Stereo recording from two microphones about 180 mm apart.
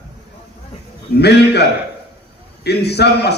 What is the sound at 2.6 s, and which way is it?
Speech, 65° left (ahead or behind).